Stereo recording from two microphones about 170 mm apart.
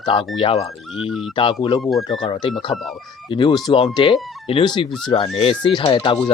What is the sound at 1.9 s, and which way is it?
Speech, 25° left (ahead or behind).